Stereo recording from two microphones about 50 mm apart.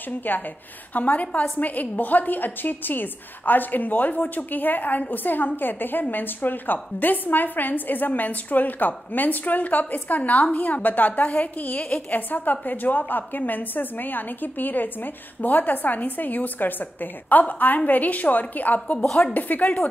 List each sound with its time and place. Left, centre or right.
0.3 s a woman's voice: left